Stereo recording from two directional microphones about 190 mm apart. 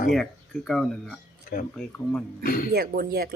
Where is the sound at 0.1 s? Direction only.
Centre (ahead or behind).